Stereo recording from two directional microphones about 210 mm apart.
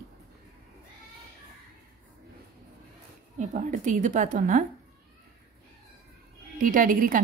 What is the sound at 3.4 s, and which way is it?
A woman's voice, 35° right (ahead or behind).